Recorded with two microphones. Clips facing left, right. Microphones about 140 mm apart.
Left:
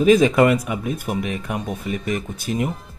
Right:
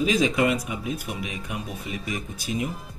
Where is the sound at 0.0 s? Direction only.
55° left (ahead or behind).